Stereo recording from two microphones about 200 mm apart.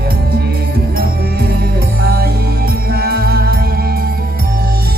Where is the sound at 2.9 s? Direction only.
50° right (ahead or behind).